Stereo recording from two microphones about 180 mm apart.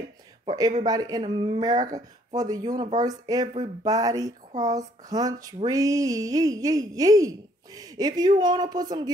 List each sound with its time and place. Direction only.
0.5 s female singing: 20° right (ahead or behind)